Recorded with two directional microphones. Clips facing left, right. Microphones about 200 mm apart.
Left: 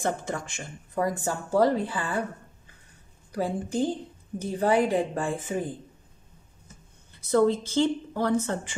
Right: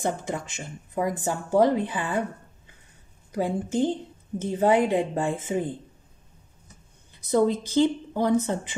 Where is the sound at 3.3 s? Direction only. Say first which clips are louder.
Right 2 dB; 20° right (ahead or behind).